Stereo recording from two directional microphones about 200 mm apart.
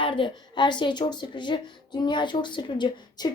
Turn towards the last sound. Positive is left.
turn(degrees=20)  # may be behind; listen again after turning